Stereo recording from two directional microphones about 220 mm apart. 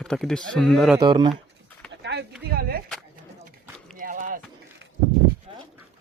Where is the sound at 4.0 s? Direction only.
35° right (ahead or behind).